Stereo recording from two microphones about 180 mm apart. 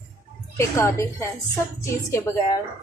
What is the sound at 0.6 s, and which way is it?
A woman's voice, 15° left (ahead or behind).